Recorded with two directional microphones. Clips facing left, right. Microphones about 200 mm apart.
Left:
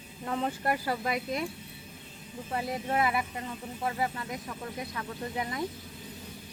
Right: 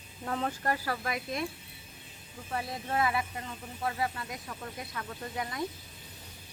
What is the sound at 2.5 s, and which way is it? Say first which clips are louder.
Speech: left 3 dB; 20° left (ahead or behind).